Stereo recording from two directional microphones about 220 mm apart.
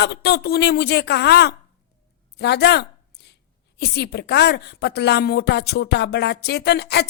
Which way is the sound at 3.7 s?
50° left (ahead or behind).